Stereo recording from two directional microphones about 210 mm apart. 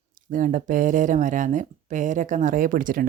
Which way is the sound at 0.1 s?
40° right (ahead or behind).